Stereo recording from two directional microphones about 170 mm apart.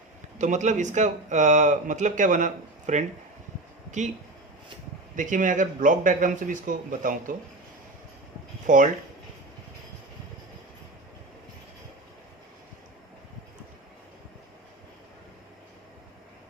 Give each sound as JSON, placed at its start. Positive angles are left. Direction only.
{"t": 0.3, "sound": "speech", "side_deg": -45}
{"t": 5.1, "sound": "speech", "side_deg": -50}
{"t": 8.6, "sound": "speech", "side_deg": -50}